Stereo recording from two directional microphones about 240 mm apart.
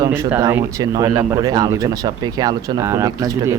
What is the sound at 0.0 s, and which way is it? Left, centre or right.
Speech, centre.